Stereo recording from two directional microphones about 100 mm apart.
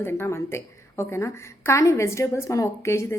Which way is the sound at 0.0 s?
25° left (ahead or behind).